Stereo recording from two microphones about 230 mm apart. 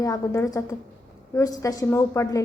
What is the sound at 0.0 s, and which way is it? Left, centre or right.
A woman's voice, centre.